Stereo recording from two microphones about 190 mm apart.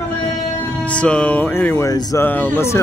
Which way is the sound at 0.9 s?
5° left (ahead or behind).